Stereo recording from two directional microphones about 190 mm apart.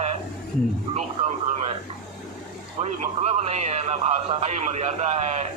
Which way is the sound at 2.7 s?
35° right (ahead or behind).